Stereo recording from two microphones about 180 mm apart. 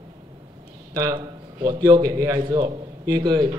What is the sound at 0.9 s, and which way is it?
A man's voice, 20° right (ahead or behind).